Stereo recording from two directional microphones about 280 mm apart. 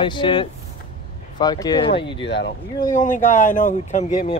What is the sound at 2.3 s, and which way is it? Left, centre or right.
Speech, left.